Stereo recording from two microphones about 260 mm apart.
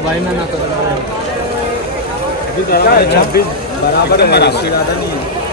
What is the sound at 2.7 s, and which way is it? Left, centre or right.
Speech, left.